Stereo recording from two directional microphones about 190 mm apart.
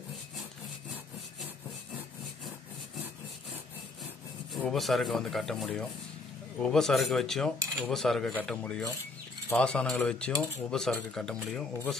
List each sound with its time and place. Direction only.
4.6 s speech: centre (ahead or behind)